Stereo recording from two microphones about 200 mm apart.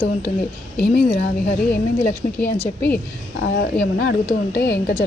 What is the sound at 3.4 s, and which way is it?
Speech, 55° left (ahead or behind).